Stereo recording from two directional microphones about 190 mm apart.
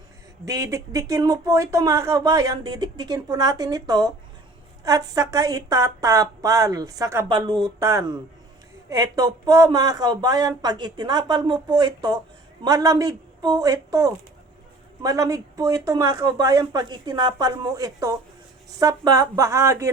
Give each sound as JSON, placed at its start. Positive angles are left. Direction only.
{"t": 0.4, "sound": "speech", "side_deg": -15}